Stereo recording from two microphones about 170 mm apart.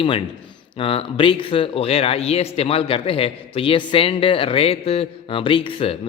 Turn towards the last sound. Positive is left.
turn(degrees=35)  # may be behind; listen again after turning